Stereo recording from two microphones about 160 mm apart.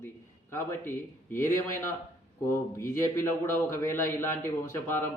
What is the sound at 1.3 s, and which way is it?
Speech, 15° left (ahead or behind).